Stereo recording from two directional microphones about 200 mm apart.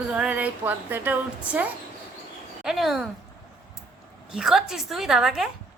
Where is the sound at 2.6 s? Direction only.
Centre (ahead or behind).